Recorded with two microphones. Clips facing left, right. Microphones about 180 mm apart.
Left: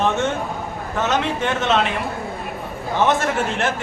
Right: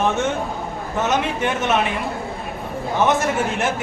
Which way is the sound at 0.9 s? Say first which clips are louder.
Even; 15° right (ahead or behind).